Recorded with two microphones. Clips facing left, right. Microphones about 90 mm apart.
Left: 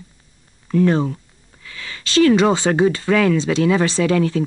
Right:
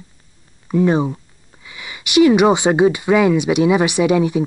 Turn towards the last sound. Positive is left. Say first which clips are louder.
# right 2 dB
turn(degrees=-15)  # may be behind; listen again after turning